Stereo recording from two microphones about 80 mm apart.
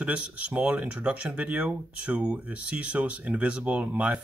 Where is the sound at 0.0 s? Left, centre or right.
Centre.